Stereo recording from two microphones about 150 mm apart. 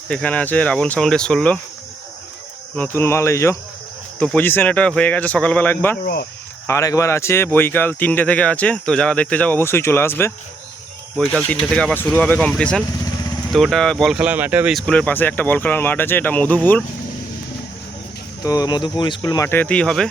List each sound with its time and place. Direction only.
0.1 s speech: 10° left (ahead or behind)
2.7 s speech: 15° left (ahead or behind)
4.2 s speech: 10° left (ahead or behind)
6.0 s speech: 80° left
6.7 s speech: 20° left (ahead or behind)
11.4 s speech: 10° left (ahead or behind); by 14.8 s 10° right (ahead or behind)
14.8 s speech: 5° left (ahead or behind)
18.4 s speech: 25° left (ahead or behind)
19.5 s speech: 10° left (ahead or behind)